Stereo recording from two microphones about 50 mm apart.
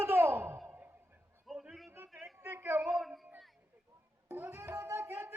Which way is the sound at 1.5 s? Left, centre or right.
Centre.